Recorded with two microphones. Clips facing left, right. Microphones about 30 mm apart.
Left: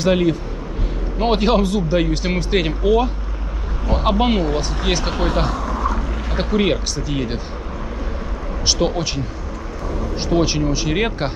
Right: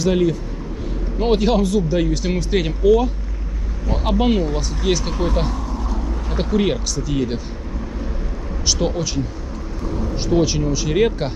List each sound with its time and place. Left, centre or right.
0.0 s speech: left
5.1 s speech: left
5.7 s boat: left
6.3 s speech: centre
8.6 s speech: left